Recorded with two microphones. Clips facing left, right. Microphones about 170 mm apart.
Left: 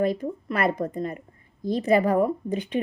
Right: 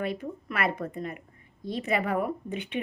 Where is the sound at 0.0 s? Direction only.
35° left (ahead or behind).